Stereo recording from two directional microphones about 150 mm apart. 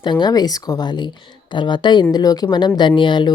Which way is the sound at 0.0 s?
30° left (ahead or behind).